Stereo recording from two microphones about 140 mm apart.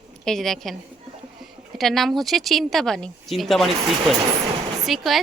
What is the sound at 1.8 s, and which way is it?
Speech, centre (ahead or behind).